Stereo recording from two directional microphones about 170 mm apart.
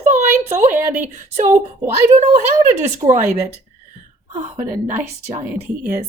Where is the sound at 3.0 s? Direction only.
15° right (ahead or behind).